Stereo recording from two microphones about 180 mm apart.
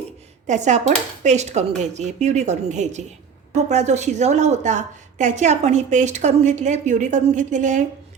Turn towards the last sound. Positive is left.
turn(degrees=-45)  # may be behind; listen again after turning